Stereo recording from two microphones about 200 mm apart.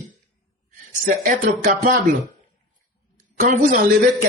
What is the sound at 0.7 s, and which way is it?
Speech, 40° right (ahead or behind).